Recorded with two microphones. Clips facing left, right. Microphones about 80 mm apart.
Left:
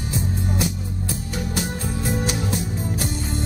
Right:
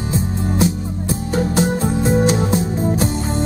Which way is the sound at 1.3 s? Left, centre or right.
Right.